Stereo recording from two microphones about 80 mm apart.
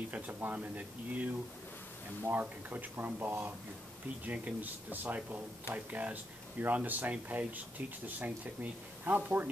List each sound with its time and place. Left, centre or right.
0.1 s speech: right